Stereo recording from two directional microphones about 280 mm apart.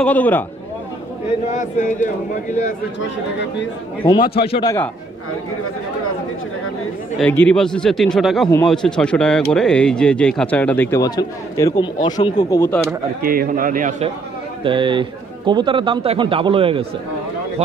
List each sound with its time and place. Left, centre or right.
0.0 s speech: centre
1.5 s a man's voice: left
4.0 s a man's voice: centre
7.2 s speech: centre
13.2 s a man's voice: right